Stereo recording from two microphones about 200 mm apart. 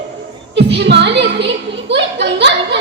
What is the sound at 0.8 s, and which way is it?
Music, 60° right (ahead or behind).